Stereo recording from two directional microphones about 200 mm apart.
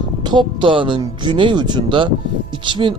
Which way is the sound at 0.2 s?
20° right (ahead or behind).